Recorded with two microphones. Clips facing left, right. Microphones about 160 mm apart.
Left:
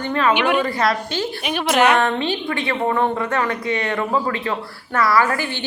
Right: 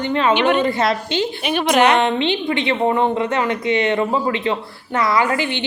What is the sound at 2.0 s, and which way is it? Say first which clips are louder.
A woman's voice: right 2 dB; 20° right (ahead or behind).